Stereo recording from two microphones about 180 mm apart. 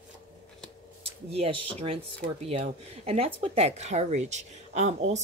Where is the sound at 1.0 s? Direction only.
35° right (ahead or behind).